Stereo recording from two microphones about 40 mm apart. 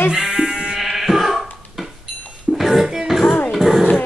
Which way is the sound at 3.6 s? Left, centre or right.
Centre.